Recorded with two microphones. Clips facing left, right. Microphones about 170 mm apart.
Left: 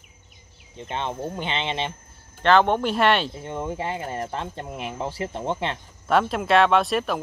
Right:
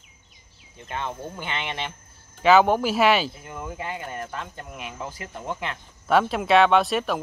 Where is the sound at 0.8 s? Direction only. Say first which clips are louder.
Left 3 dB; 20° left (ahead or behind).